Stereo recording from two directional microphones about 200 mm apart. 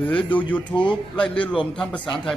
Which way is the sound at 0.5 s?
5° left (ahead or behind).